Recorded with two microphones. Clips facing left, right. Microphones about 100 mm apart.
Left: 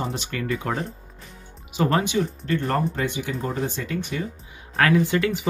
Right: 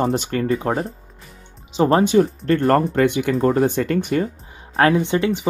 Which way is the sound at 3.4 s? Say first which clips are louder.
Right 12 dB; 55° right (ahead or behind).